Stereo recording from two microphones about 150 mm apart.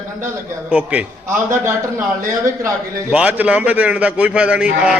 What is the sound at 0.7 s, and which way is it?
A man's voice, 10° right (ahead or behind).